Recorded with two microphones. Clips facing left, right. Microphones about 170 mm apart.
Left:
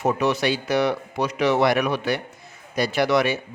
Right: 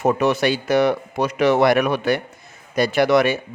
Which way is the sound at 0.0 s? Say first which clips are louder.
Right 3 dB; 50° right (ahead or behind).